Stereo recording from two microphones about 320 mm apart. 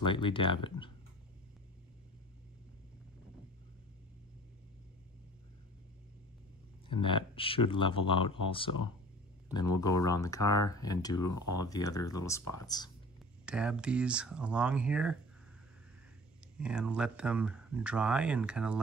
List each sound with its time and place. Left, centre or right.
0.0 s speech: centre
6.9 s speech: centre
9.8 s speech: centre
11.1 s speech: left
11.6 s speech: centre
13.5 s speech: centre
16.5 s speech: centre